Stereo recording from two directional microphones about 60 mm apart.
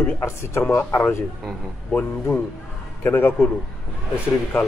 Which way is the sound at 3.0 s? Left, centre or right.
Left.